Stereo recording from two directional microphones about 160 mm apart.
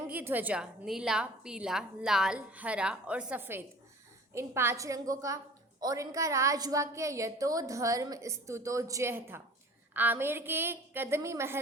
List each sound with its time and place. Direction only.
0.1 s a woman's voice: 10° right (ahead or behind)